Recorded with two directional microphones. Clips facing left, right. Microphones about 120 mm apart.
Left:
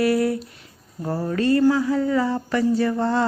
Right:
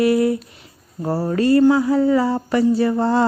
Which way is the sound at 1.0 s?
35° right (ahead or behind).